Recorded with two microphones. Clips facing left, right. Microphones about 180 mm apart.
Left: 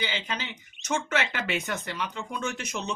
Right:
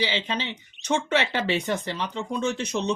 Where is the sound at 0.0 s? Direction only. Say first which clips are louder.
Right 5 dB; 30° right (ahead or behind).